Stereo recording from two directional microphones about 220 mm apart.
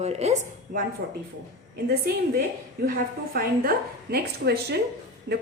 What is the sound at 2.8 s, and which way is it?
A woman's voice, 45° right (ahead or behind).